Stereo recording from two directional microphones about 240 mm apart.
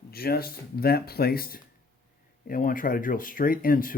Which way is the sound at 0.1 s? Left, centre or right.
Left.